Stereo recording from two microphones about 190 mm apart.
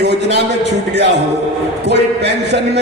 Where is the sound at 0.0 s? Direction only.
60° right (ahead or behind).